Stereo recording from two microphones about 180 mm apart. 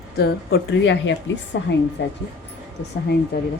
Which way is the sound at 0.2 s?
70° left (ahead or behind).